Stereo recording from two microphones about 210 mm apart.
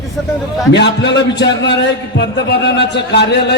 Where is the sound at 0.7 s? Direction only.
55° left (ahead or behind).